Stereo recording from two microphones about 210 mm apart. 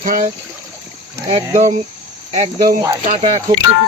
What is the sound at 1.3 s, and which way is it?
Speech, 30° right (ahead or behind).